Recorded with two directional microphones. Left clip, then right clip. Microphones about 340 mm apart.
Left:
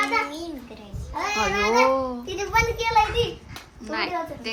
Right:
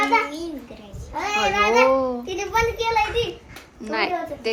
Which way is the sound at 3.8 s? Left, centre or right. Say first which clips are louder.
Right 3 dB; centre.